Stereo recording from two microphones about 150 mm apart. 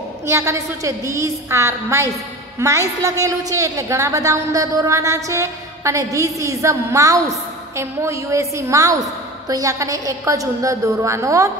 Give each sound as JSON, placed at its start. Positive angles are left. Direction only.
{"t": 0.3, "sound": "a woman's voice", "side_deg": -20}